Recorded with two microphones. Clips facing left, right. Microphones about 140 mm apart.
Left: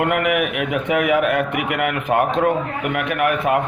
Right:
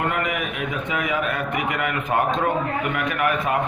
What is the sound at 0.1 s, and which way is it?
A man's voice, 65° left (ahead or behind).